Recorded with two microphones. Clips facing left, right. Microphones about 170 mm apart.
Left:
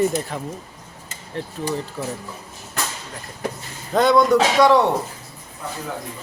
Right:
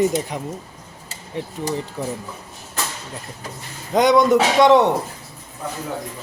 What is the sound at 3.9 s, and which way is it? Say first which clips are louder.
Speech: right 1 dB; 15° right (ahead or behind).